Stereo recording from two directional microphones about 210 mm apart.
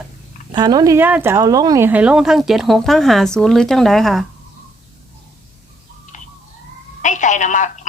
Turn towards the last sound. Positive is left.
turn(degrees=35)  # may be behind; listen again after turning